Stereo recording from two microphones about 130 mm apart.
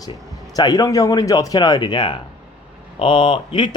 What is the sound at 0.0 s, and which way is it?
Speech, 30° left (ahead or behind).